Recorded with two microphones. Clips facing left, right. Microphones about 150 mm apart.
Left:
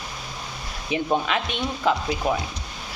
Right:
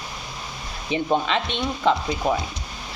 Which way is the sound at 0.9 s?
5° left (ahead or behind).